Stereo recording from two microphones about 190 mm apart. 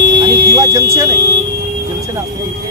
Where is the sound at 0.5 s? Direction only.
15° right (ahead or behind).